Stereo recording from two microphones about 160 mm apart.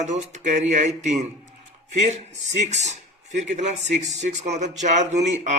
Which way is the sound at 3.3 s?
50° right (ahead or behind).